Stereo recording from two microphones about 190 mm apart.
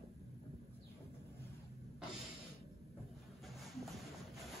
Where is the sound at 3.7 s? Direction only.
Centre (ahead or behind).